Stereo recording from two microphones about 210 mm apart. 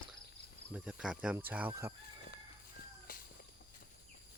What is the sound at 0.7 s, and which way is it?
Speech, 5° right (ahead or behind).